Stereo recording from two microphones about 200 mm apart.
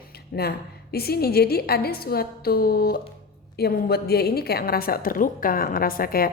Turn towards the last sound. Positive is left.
turn(degrees=45)  # may be behind; listen again after turning